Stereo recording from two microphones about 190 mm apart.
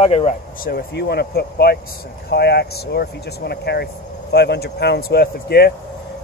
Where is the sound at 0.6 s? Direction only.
55° left (ahead or behind).